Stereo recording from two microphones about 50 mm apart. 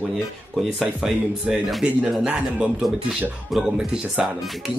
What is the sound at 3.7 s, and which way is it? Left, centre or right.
Speech, centre.